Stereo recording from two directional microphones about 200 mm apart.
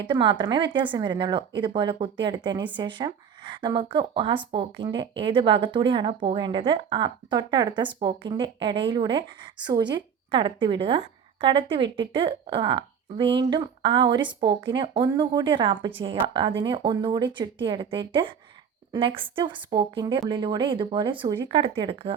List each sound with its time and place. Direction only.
0.0 s a woman's voice: 25° right (ahead or behind)